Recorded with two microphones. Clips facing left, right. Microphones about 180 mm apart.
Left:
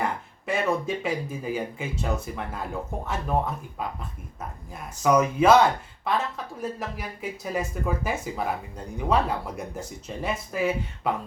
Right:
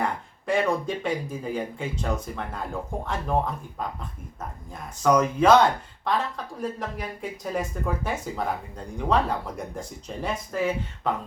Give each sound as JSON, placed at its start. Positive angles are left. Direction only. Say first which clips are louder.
{"t": 0.0, "sound": "speech", "louder": "right 1 dB", "side_deg": 5}